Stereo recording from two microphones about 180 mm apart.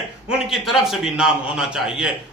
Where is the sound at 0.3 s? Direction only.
Centre (ahead or behind).